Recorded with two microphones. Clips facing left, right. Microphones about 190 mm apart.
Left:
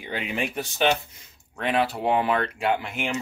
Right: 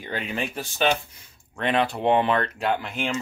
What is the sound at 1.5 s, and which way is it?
Speech, 5° left (ahead or behind).